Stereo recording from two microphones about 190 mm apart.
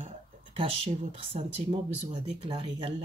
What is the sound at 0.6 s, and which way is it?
Speech, 30° right (ahead or behind).